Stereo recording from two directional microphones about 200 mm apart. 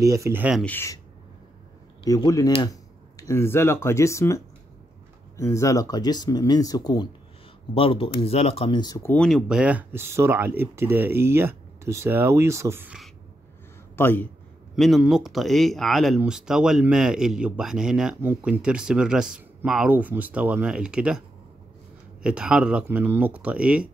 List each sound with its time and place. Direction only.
0.0 s speech: 15° right (ahead or behind)
0.7 s a man's voice: 15° left (ahead or behind)
2.0 s speech: 15° left (ahead or behind)
5.4 s speech: 15° left (ahead or behind); by 13.1 s 5° right (ahead or behind)
13.9 s a man's voice: 10° left (ahead or behind)
14.8 s speech: centre (ahead or behind)
22.2 s speech: 5° right (ahead or behind)